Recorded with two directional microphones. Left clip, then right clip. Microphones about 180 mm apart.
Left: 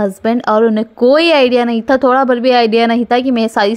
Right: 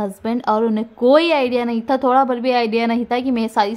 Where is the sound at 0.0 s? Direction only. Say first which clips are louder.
Left 7 dB; 25° left (ahead or behind).